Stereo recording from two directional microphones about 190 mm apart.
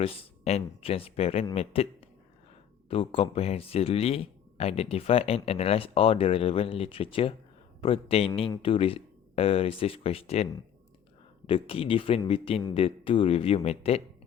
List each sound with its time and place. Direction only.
0.0 s speech: 30° left (ahead or behind)
2.9 s speech: 30° left (ahead or behind)